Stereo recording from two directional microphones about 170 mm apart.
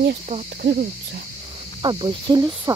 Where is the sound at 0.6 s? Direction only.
60° right (ahead or behind).